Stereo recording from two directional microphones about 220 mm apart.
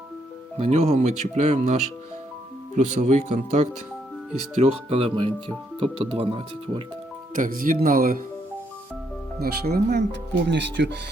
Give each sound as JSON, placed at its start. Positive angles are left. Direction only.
{"t": 0.6, "sound": "speech", "side_deg": -30}
{"t": 7.3, "sound": "speech", "side_deg": -40}
{"t": 9.4, "sound": "speech", "side_deg": -45}